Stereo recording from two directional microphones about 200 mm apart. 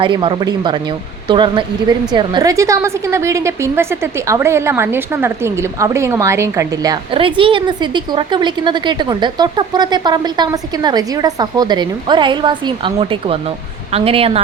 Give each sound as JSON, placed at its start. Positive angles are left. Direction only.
{"t": 0.0, "sound": "a woman's voice", "side_deg": -25}